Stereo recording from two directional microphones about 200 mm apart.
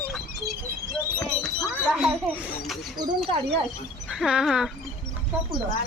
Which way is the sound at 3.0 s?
25° right (ahead or behind).